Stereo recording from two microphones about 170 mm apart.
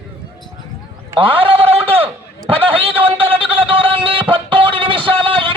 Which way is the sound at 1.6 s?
35° right (ahead or behind).